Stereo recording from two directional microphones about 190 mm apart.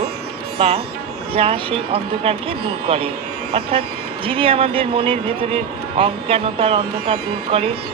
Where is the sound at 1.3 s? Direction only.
30° right (ahead or behind).